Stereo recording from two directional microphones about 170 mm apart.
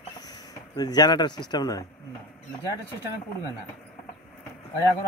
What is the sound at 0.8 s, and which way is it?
A man's voice, 25° left (ahead or behind).